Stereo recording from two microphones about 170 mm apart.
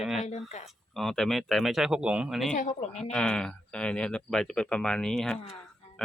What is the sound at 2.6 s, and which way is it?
Speech, 45° left (ahead or behind).